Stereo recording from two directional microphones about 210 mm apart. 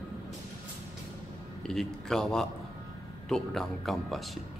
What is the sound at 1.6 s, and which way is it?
A man's voice, centre (ahead or behind).